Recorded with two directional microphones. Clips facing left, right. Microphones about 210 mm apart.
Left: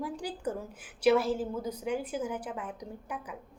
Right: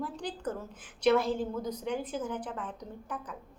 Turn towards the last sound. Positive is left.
turn(degrees=10)  # may be behind; listen again after turning